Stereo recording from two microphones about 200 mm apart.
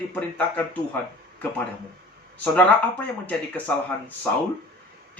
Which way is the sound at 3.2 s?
5° left (ahead or behind).